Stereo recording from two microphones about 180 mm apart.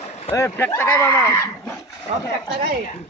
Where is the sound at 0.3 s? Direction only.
15° left (ahead or behind).